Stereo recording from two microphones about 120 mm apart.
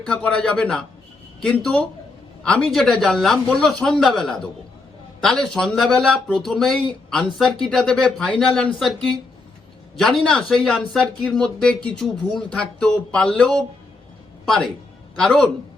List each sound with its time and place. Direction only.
0.1 s a man's voice: 5° left (ahead or behind)
5.5 s speech: 5° left (ahead or behind)
15.1 s a man's voice: 5° left (ahead or behind)